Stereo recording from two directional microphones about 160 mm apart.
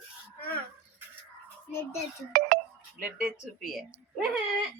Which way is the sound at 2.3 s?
65° right (ahead or behind).